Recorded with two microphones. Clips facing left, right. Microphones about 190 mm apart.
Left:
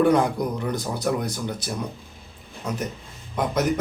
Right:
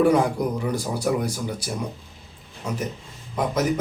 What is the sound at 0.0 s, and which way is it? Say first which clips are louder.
Speech: even; 5° right (ahead or behind).